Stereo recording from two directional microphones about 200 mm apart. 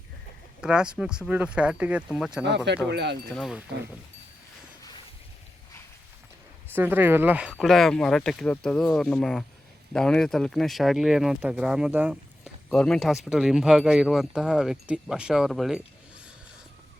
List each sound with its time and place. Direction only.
0.6 s speech: 5° right (ahead or behind)
2.9 s speech: 55° right (ahead or behind)
3.3 s speech: centre (ahead or behind)
6.7 s speech: 10° right (ahead or behind)